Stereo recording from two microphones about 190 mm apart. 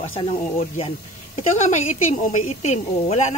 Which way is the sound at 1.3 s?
40° left (ahead or behind).